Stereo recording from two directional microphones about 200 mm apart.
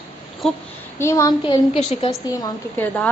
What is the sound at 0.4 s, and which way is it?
Speech, centre (ahead or behind).